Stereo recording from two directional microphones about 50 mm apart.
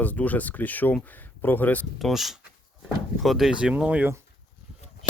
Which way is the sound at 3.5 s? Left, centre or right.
Centre.